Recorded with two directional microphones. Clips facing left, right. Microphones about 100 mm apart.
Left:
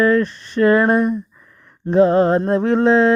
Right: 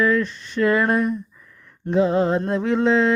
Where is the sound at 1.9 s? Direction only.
50° left (ahead or behind).